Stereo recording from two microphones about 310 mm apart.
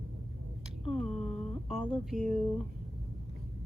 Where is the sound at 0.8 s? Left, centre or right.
Centre.